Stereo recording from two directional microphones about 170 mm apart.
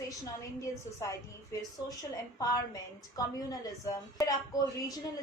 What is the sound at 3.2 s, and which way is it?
A woman's voice, 20° left (ahead or behind).